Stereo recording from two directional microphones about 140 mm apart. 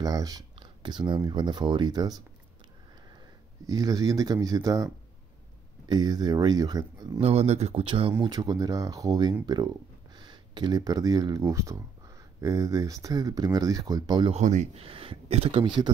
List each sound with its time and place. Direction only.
0.0 s speech: 25° right (ahead or behind)
3.6 s speech: 25° right (ahead or behind)
7.2 s speech: 50° right (ahead or behind)
8.2 s speech: 30° right (ahead or behind)
14.3 s speech: 55° right (ahead or behind); by 15.9 s 35° right (ahead or behind)